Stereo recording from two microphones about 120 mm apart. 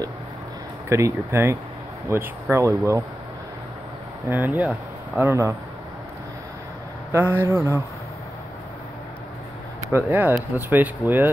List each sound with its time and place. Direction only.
0.8 s speech: 25° right (ahead or behind)
4.3 s speech: 15° right (ahead or behind)
7.1 s speech: 20° right (ahead or behind)
9.9 s speech: 15° right (ahead or behind)